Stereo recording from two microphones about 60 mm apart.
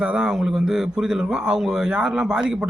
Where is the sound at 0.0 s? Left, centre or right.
Centre.